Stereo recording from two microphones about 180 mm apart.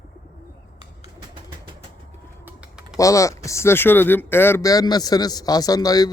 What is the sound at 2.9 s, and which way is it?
Speech, 15° left (ahead or behind).